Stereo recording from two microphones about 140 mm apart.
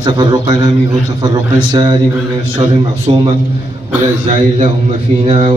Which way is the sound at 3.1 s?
40° right (ahead or behind).